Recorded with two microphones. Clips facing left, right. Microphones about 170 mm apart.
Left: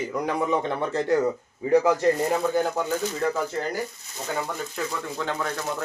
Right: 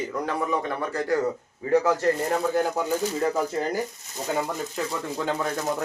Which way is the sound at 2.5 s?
5° right (ahead or behind).